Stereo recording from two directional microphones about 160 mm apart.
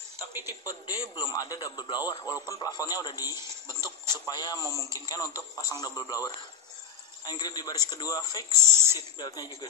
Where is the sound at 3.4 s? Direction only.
20° right (ahead or behind).